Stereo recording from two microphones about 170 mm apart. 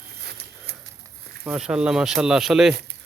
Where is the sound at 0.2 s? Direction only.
70° right (ahead or behind).